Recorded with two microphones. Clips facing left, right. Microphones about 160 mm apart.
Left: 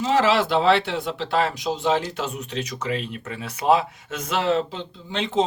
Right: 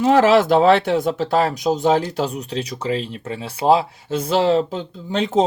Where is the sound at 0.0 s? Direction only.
50° right (ahead or behind).